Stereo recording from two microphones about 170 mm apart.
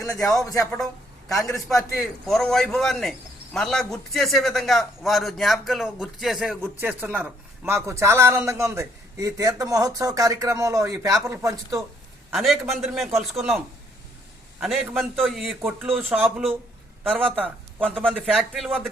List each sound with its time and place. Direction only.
0.1 s speech: 20° left (ahead or behind)
1.5 s a man's voice: centre (ahead or behind); by 11.9 s 20° right (ahead or behind)
12.3 s a man's voice: centre (ahead or behind)
14.6 s a man's voice: centre (ahead or behind)
18.1 s a man's voice: centre (ahead or behind)